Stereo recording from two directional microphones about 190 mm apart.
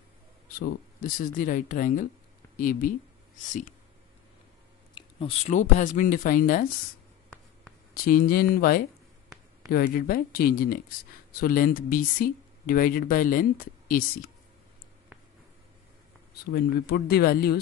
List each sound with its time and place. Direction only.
0.6 s speech: 50° left (ahead or behind)
4.9 s a sound: 25° left (ahead or behind)
5.5 s speech: 40° left (ahead or behind)
7.9 s speech: 50° left (ahead or behind)
16.5 s speech: 55° left (ahead or behind)